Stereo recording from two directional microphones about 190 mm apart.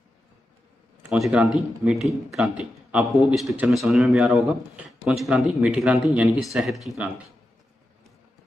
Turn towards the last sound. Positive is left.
turn(degrees=0)  # may be behind; listen again after turning